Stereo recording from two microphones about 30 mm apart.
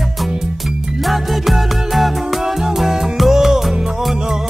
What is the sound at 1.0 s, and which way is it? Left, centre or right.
Music, centre.